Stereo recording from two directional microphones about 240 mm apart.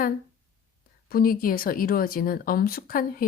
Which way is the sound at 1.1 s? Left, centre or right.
Left.